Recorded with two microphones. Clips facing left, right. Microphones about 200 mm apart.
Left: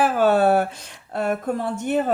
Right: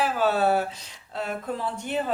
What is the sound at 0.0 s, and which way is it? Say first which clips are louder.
Speech: left 6 dB; 55° left (ahead or behind).